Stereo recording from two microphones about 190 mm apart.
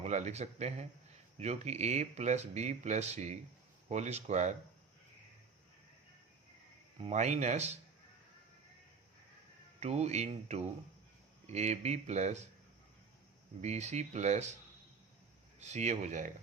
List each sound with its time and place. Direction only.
0.0 s speech: 35° right (ahead or behind)
7.0 s speech: 35° right (ahead or behind)
9.8 s speech: 35° right (ahead or behind)
13.6 s speech: 35° right (ahead or behind)
15.6 s speech: 35° right (ahead or behind)